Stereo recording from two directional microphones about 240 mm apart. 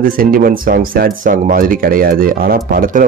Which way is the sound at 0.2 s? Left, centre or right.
Right.